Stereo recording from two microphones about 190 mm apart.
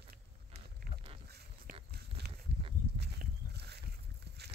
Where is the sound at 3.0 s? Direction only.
60° right (ahead or behind).